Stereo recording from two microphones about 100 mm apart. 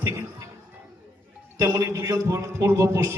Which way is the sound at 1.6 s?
30° right (ahead or behind).